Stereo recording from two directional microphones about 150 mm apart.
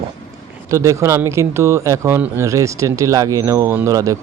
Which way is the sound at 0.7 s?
20° right (ahead or behind).